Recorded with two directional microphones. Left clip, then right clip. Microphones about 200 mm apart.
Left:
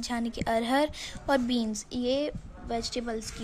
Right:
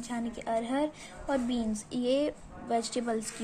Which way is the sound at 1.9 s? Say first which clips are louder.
Even; 15° left (ahead or behind).